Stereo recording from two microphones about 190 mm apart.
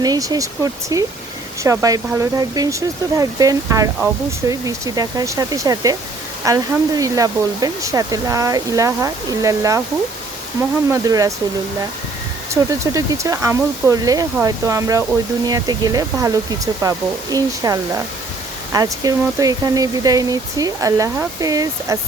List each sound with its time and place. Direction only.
0.0 s speech: 20° right (ahead or behind)
10.9 s speech: 20° right (ahead or behind)
12.8 s speech: 15° right (ahead or behind)